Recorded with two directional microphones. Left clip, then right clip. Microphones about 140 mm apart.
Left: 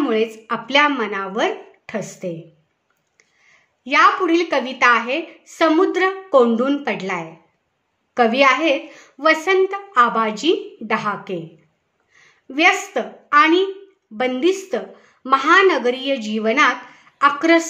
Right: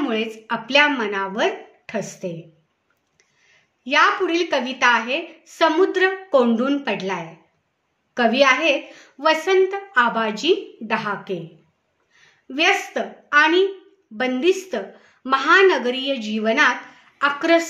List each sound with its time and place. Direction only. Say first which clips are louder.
0.0 s a woman's voice: left 4 dB; 40° left (ahead or behind)
3.4 s a woman's voice: even; 40° left (ahead or behind)